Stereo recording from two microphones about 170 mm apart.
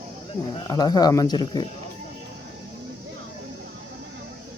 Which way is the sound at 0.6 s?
20° left (ahead or behind).